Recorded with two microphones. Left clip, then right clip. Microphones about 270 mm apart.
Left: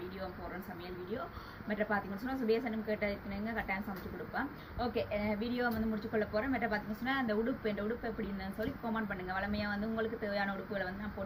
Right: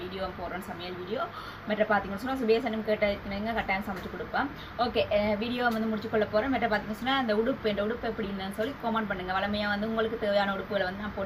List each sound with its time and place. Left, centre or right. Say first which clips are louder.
1.7 s a woman's voice: right 9 dB; centre